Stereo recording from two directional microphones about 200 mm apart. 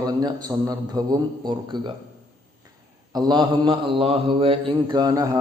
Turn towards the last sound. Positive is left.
turn(degrees=-20)  # may be behind; listen again after turning